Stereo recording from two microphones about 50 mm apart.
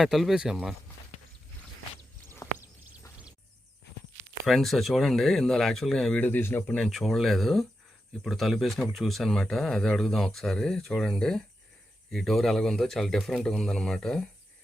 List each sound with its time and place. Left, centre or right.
0.0 s speech: centre
2.6 s a sound: right
4.4 s speech: centre
6.1 s a man's voice: left
6.4 s speech: left
6.8 s speech: centre